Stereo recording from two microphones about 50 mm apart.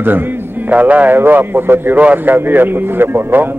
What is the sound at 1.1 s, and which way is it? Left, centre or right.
Speech, right.